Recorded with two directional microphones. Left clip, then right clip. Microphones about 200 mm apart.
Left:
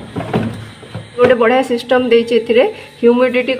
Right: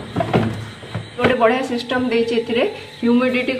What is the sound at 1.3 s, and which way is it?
A woman's voice, 55° left (ahead or behind).